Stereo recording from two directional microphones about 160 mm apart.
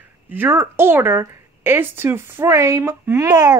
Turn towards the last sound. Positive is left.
turn(degrees=-25)  # may be behind; listen again after turning